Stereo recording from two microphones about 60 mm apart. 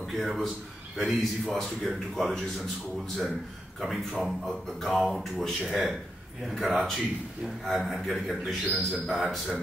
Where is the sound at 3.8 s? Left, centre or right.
Centre.